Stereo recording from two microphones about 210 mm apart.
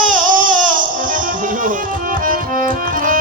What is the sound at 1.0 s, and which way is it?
Music, 40° right (ahead or behind).